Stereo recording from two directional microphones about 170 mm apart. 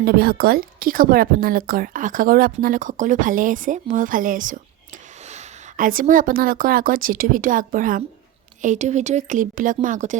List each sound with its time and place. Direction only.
0.0 s a woman's voice: 65° right (ahead or behind); by 10.2 s 50° right (ahead or behind)